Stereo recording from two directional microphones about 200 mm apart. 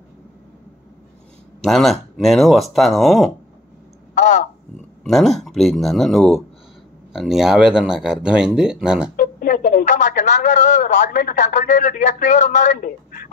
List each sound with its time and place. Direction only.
1.6 s speech: centre (ahead or behind)
5.0 s speech: centre (ahead or behind)
9.1 s speech: 45° left (ahead or behind)